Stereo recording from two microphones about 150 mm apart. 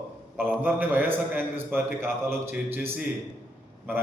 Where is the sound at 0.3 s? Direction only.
10° right (ahead or behind).